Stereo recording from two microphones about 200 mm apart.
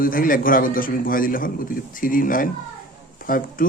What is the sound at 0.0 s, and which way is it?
A man's voice, 45° left (ahead or behind).